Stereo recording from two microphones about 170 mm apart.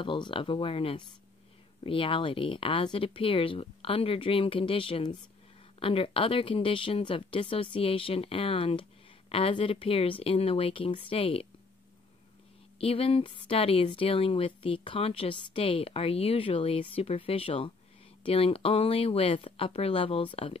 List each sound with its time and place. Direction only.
0.0 s speech: 30° left (ahead or behind)
12.7 s speech: 35° left (ahead or behind)